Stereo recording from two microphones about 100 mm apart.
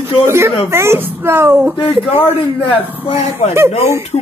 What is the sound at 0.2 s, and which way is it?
A woman's voice, 25° right (ahead or behind).